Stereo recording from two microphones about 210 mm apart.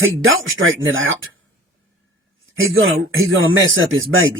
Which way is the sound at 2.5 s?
70° right (ahead or behind).